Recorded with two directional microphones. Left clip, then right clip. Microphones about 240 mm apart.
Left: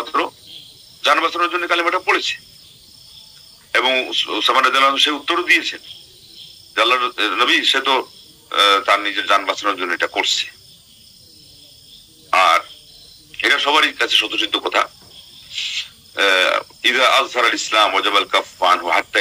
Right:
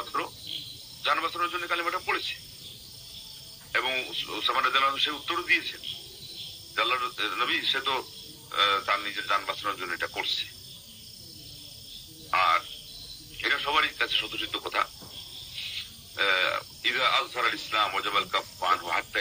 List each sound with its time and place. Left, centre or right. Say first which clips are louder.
0.0 s cricket: left 12 dB; left
1.0 s a man's voice: left 11 dB; left
3.7 s a man's voice: left 12 dB; left
12.3 s frog: left 10 dB; left
13.4 s a man's voice: left 11 dB; left